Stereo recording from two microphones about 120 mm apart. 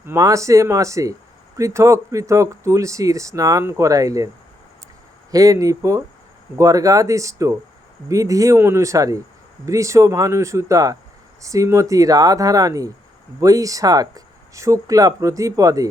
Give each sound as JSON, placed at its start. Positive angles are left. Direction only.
{"t": 0.0, "sound": "speech", "side_deg": -25}
{"t": 5.3, "sound": "speech", "side_deg": -30}